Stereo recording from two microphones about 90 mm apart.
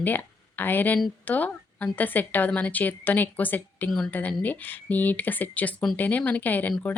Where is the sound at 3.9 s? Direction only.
5° left (ahead or behind).